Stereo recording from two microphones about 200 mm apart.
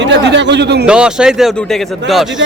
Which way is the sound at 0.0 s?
60° right (ahead or behind).